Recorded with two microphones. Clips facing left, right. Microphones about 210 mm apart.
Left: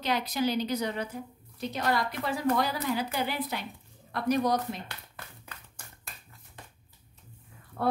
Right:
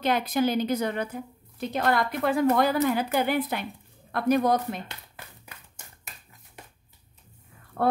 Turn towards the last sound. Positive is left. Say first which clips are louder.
# right 4 dB
turn(degrees=-55)  # may be behind; listen again after turning